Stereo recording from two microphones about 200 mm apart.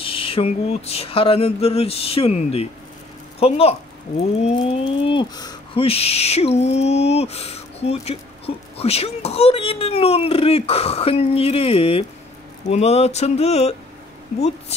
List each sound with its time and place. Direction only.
0.0 s speech: 25° left (ahead or behind)